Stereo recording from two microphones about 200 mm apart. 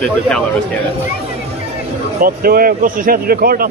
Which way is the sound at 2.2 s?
45° right (ahead or behind).